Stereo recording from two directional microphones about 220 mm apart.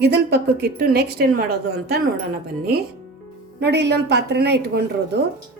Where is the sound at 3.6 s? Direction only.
50° right (ahead or behind).